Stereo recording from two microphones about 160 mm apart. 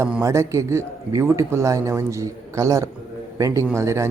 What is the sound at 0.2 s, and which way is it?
A man's voice, 20° right (ahead or behind).